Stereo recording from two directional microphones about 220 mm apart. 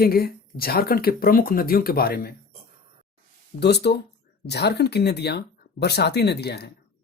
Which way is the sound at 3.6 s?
50° left (ahead or behind).